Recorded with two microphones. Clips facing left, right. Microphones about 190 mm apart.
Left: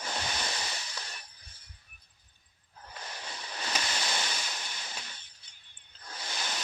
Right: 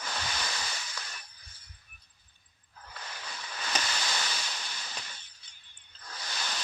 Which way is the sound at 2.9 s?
25° left (ahead or behind).